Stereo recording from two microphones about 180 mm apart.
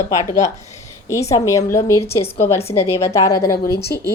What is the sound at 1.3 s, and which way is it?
A woman's voice, 20° left (ahead or behind).